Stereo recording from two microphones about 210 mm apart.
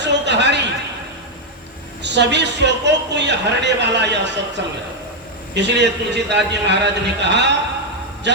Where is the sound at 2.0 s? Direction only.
55° right (ahead or behind).